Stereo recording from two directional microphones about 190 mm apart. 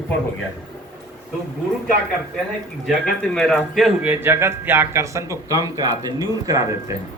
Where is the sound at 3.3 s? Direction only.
Centre (ahead or behind).